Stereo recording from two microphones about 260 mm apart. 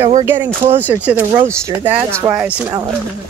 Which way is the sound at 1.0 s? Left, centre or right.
Centre.